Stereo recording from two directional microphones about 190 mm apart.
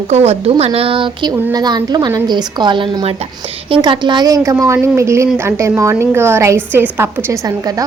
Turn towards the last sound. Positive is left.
turn(degrees=-15)  # may be behind; listen again after turning